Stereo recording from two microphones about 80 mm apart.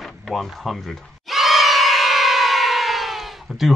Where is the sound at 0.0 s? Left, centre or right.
Centre.